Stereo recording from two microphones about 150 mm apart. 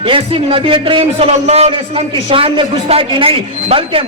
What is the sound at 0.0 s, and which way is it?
A man's voice, 35° right (ahead or behind).